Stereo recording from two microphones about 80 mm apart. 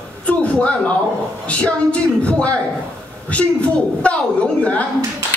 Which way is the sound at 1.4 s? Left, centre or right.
Centre.